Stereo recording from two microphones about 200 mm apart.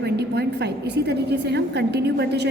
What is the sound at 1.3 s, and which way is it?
A woman's voice, 55° right (ahead or behind).